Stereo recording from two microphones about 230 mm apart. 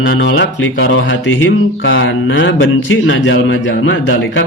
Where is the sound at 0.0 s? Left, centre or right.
Left.